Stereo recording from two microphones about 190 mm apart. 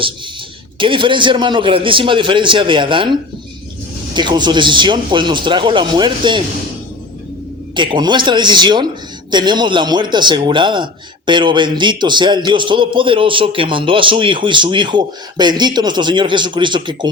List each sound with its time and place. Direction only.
0.8 s a man's voice: 25° right (ahead or behind)
4.1 s a man's voice: 25° right (ahead or behind)
7.8 s a man's voice: 25° right (ahead or behind)